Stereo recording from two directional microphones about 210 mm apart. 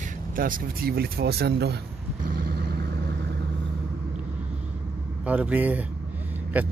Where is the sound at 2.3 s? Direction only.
45° right (ahead or behind).